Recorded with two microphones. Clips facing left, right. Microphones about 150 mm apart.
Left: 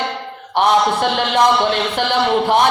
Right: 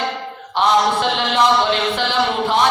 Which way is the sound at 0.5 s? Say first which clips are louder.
Left 1 dB; 55° left (ahead or behind).